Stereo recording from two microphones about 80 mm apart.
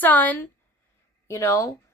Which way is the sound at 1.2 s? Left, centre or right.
Left.